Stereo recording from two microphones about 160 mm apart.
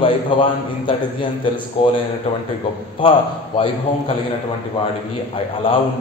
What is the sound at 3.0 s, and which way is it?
Speech, 30° left (ahead or behind).